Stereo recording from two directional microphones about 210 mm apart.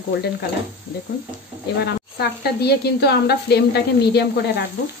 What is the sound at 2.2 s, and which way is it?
A woman's voice, 50° left (ahead or behind).